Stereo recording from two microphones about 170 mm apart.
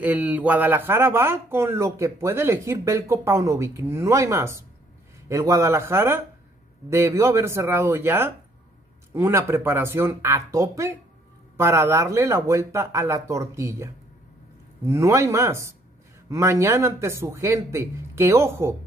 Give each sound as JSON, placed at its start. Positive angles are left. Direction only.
{"t": 0.0, "sound": "speech", "side_deg": -10}
{"t": 14.9, "sound": "speech", "side_deg": -15}